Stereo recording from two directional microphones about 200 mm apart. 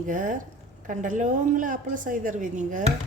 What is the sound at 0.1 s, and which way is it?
A woman's voice, 40° right (ahead or behind).